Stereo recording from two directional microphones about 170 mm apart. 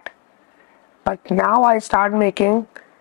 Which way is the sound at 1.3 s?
20° left (ahead or behind).